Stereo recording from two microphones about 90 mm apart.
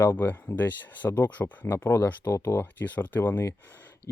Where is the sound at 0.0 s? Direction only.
25° left (ahead or behind).